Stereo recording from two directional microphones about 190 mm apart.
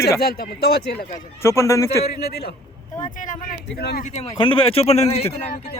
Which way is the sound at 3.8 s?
55° left (ahead or behind).